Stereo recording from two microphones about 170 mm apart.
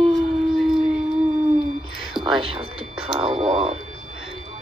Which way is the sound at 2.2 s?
30° right (ahead or behind).